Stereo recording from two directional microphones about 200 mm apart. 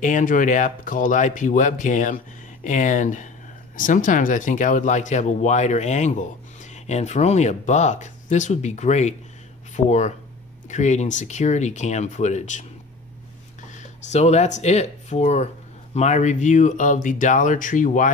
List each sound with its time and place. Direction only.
0.0 s speech: 40° left (ahead or behind)
13.7 s speech: 35° left (ahead or behind)